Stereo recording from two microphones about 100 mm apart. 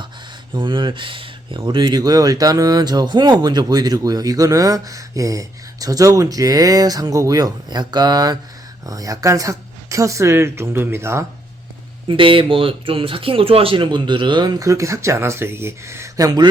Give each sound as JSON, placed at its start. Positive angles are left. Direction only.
{"t": 0.5, "sound": "speech", "side_deg": -55}
{"t": 12.0, "sound": "speech", "side_deg": -60}